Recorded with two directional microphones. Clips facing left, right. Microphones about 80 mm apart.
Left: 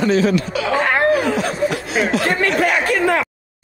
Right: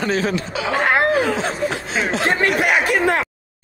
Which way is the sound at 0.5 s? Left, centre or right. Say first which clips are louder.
Left 1 dB; centre.